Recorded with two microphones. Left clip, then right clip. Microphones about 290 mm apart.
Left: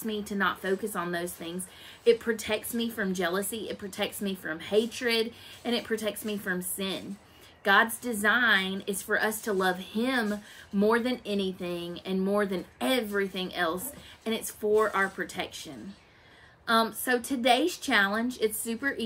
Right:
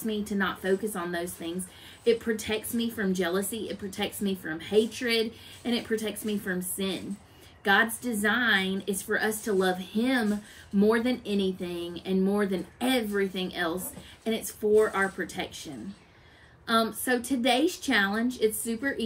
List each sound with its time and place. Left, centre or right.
0.0 s speech: centre